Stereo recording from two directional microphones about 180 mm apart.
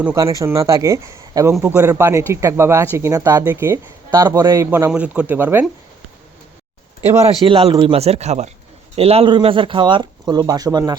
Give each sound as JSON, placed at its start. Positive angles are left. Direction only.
{"t": 0.0, "sound": "speech", "side_deg": -15}
{"t": 7.4, "sound": "speech", "side_deg": -25}